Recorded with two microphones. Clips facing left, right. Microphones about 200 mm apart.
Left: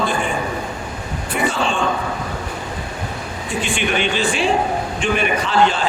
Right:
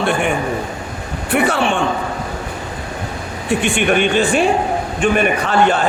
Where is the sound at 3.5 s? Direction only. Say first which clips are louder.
Right 6 dB; 60° right (ahead or behind).